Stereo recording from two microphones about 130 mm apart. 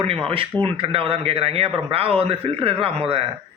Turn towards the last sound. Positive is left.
turn(degrees=-50)  # may be behind; listen again after turning